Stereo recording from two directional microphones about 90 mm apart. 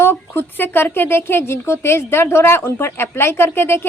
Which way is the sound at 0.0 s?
25° left (ahead or behind).